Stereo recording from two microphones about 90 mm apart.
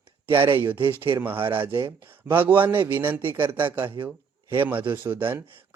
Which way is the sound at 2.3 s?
20° right (ahead or behind).